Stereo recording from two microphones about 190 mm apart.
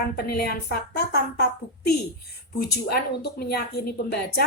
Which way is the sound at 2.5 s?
55° left (ahead or behind).